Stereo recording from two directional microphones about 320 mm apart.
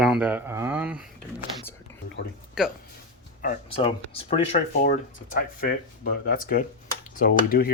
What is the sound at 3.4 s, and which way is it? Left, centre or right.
Speech, left.